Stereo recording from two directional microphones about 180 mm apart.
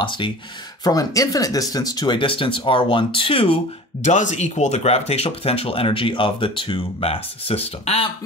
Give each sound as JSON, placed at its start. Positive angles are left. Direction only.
{"t": 0.8, "sound": "speech", "side_deg": 20}